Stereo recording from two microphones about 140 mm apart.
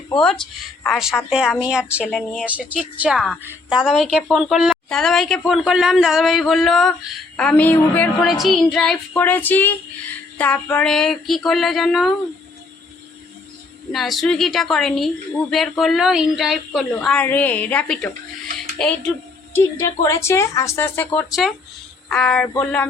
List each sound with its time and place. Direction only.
0.2 s a woman's voice: 5° left (ahead or behind)
1.8 s a woman's voice: 15° left (ahead or behind)
2.4 s a woman's voice: 10° right (ahead or behind); by 8.3 s 10° left (ahead or behind)
8.3 s a woman's voice: centre (ahead or behind)
13.9 s a woman's voice: centre (ahead or behind)
19.5 s a woman's voice: 20° left (ahead or behind)